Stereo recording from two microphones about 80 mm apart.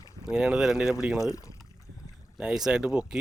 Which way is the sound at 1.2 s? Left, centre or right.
Left.